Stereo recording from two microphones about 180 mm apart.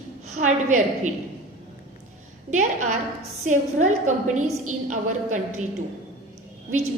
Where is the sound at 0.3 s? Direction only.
45° right (ahead or behind).